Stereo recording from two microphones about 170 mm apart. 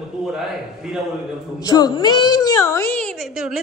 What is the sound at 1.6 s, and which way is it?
A woman's voice, 25° left (ahead or behind).